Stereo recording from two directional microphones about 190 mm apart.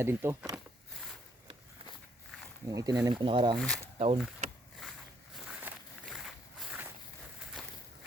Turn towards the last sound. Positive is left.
turn(degrees=0)  # may be behind; listen again after turning